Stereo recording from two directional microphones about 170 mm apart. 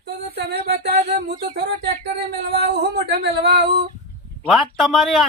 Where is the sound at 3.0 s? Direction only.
80° right.